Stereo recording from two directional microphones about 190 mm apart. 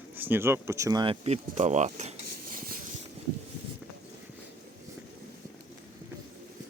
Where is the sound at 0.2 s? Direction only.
10° right (ahead or behind); by 1.4 s 30° right (ahead or behind).